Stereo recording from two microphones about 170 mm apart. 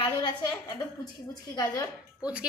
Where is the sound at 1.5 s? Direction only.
25° left (ahead or behind).